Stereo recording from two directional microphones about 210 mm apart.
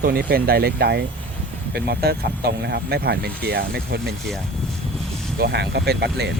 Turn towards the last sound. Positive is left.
turn(degrees=-50)  # may be behind; listen again after turning